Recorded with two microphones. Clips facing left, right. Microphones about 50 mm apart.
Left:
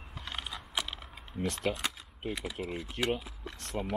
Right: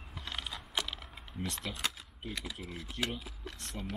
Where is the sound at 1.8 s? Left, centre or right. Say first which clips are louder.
Left 2 dB; centre.